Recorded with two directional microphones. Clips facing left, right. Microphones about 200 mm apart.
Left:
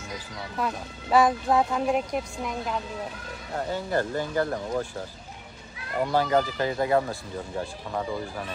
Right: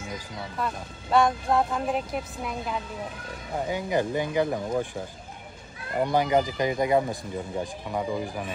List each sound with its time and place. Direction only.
0.6 s speech: centre (ahead or behind)
3.5 s speech: 15° right (ahead or behind)